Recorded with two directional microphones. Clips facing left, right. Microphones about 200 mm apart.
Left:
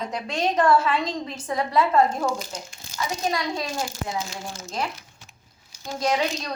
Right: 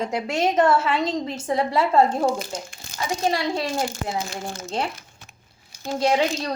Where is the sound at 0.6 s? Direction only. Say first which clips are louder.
Even; 25° right (ahead or behind).